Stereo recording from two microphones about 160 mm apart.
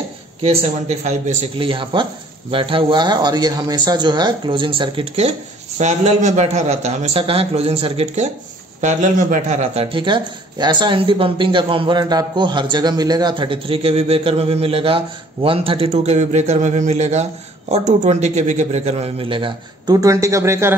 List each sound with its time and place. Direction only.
0.4 s a man's voice: 40° right (ahead or behind)
8.8 s speech: 50° right (ahead or behind); by 20.7 s 15° right (ahead or behind)